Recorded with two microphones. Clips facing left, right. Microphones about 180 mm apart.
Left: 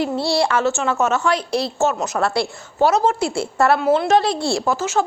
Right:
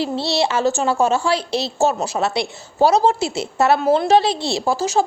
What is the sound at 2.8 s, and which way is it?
Speech, 30° right (ahead or behind).